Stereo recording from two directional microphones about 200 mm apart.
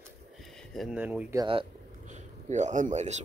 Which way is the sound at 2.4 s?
35° right (ahead or behind).